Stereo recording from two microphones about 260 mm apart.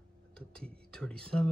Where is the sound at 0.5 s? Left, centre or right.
Centre.